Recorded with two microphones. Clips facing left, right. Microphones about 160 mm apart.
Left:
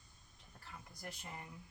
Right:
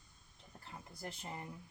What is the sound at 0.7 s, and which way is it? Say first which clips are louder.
Speech: right 3 dB; 25° right (ahead or behind).